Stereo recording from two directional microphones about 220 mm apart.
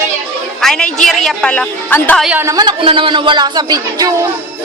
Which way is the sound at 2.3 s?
10° right (ahead or behind).